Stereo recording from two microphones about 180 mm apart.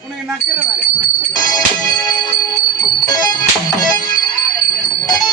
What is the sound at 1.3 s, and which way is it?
Music, 20° left (ahead or behind).